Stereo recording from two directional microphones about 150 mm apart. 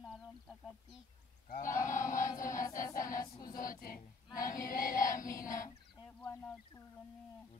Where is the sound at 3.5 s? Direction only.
70° left (ahead or behind).